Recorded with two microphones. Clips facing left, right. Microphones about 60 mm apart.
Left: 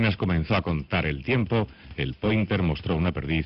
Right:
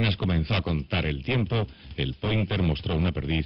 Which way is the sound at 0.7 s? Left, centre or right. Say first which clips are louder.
Left 2 dB; left.